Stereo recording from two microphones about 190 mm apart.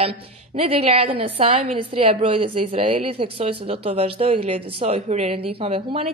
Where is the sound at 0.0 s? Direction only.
30° right (ahead or behind).